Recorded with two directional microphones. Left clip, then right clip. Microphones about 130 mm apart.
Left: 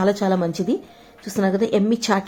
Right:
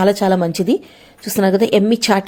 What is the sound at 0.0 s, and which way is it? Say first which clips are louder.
A woman's voice: right 5 dB; 15° right (ahead or behind).